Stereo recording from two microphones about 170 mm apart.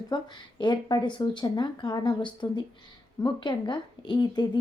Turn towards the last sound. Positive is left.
turn(degrees=25)  # may be behind; listen again after turning